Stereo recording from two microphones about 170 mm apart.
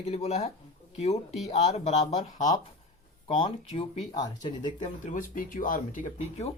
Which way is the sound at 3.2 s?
30° left (ahead or behind).